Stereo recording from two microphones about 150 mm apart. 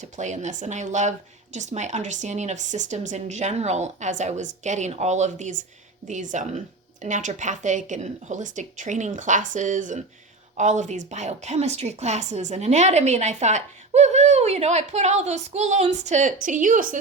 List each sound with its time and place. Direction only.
0.0 s a woman's voice: 55° right (ahead or behind)